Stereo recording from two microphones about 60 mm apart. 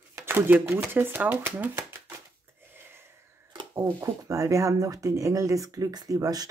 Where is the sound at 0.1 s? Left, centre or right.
Right.